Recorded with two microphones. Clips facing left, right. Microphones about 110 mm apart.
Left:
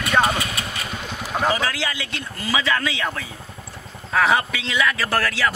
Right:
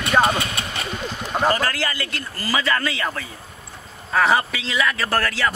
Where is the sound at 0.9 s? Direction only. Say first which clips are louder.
Right 2 dB; centre (ahead or behind).